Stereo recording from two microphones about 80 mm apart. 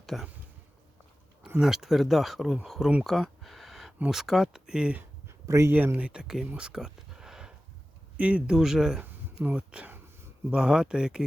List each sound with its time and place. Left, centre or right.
0.0 s speech: centre
1.6 s speech: centre
3.0 s a sound: centre
4.1 s speech: centre
5.5 s speech: right
5.7 s speech: right
6.5 s a sound: centre
8.1 s speech: centre
9.0 s speech: centre